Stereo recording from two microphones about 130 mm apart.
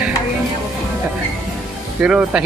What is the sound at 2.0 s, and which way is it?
Speech, 10° right (ahead or behind).